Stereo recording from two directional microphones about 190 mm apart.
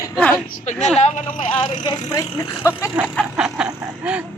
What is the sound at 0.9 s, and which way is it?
Speech, 30° left (ahead or behind).